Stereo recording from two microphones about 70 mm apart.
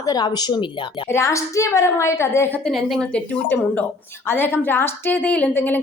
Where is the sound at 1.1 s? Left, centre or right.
Left.